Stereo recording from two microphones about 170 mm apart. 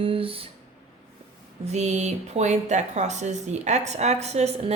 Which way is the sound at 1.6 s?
40° right (ahead or behind).